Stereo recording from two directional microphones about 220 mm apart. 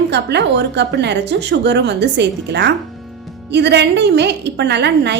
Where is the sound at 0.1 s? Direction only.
50° right (ahead or behind).